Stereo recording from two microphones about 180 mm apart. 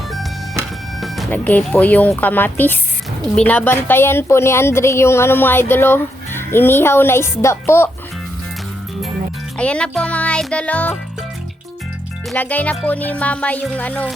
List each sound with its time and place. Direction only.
0.1 s music: centre (ahead or behind)
1.3 s a woman's voice: 10° left (ahead or behind)
9.6 s a woman's voice: 5° left (ahead or behind)
12.3 s a woman's voice: 10° left (ahead or behind)